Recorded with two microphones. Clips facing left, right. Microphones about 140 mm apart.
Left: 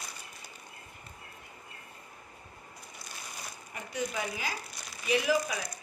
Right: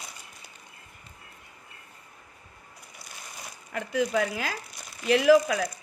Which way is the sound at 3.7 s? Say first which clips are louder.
Right 9 dB; 90° right.